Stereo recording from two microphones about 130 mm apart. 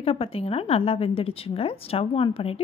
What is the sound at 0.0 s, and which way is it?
A woman's voice, 50° left (ahead or behind).